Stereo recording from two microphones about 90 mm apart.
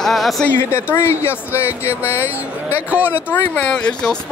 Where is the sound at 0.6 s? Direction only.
25° left (ahead or behind).